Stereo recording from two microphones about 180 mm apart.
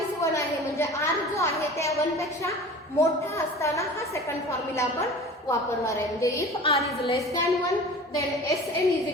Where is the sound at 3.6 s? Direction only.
15° left (ahead or behind).